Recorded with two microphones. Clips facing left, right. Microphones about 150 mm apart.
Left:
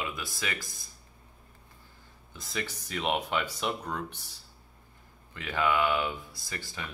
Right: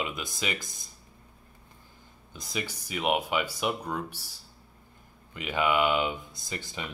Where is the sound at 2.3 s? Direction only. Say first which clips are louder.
Right 1 dB; 15° right (ahead or behind).